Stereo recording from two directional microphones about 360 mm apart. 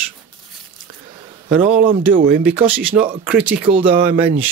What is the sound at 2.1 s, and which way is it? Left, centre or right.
Speech, right.